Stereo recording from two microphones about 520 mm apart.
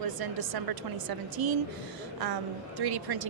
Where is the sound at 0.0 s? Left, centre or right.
Right.